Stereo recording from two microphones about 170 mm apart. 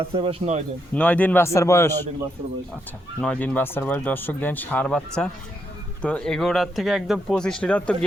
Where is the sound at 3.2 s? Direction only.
5° left (ahead or behind).